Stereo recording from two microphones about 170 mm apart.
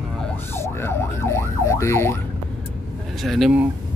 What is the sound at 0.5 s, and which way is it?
Emergency vehicle, 15° left (ahead or behind).